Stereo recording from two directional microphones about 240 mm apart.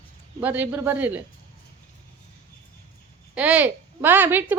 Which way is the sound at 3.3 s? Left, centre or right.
Centre.